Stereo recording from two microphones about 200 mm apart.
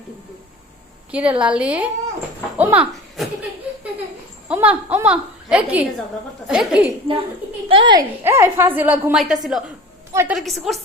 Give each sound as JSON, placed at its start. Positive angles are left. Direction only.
{"t": 1.1, "sound": "a woman's voice", "side_deg": -5}
{"t": 4.4, "sound": "a woman's voice", "side_deg": -5}
{"t": 7.7, "sound": "a woman's voice", "side_deg": -25}
{"t": 8.2, "sound": "a woman's voice", "side_deg": -10}
{"t": 10.1, "sound": "a woman's voice", "side_deg": -15}
{"t": 10.3, "sound": "a woman's voice", "side_deg": 0}